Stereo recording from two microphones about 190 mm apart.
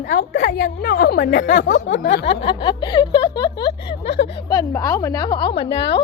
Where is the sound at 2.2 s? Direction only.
30° left (ahead or behind).